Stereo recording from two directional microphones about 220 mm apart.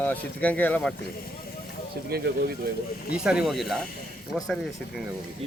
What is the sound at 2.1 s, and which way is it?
Speech, 45° right (ahead or behind).